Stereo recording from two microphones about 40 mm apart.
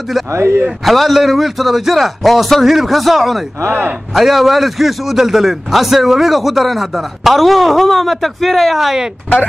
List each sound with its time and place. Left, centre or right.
0.4 s a man's voice: right
0.8 s a man's voice: centre